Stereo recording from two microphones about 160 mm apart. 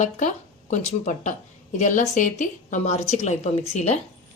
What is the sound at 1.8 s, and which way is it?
A woman's voice, 50° left (ahead or behind).